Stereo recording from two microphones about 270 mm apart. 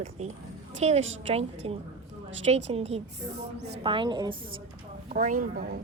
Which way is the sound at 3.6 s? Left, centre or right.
Right.